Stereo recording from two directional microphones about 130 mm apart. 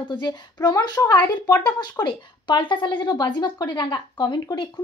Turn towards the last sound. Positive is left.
turn(degrees=35)  # may be behind; listen again after turning